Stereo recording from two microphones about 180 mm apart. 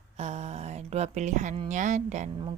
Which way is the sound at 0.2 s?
40° right (ahead or behind).